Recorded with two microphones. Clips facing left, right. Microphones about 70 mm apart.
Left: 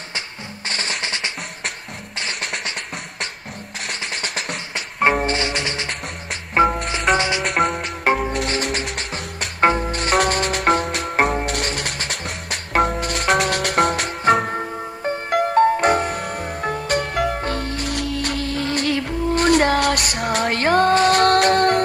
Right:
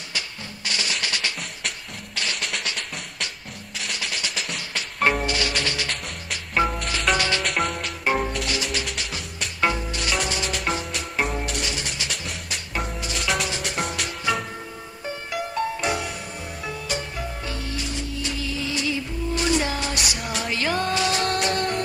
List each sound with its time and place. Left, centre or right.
0.7 s music: left
4.0 s percussion: left
5.1 s music: left
7.5 s music: left
17.4 s music: left